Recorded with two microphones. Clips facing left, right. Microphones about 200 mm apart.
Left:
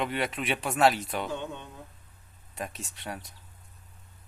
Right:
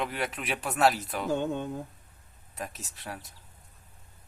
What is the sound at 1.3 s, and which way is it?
Speech, 45° right (ahead or behind).